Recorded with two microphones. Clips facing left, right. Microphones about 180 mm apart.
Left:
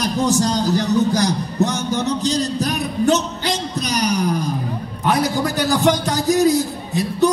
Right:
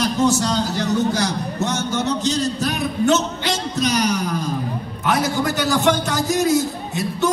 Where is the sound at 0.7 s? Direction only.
35° left (ahead or behind).